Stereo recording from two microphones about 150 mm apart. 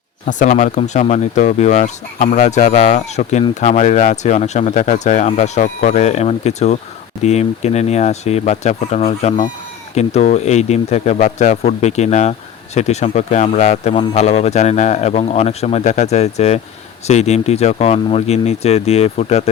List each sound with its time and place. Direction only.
0.3 s speech: 55° left (ahead or behind)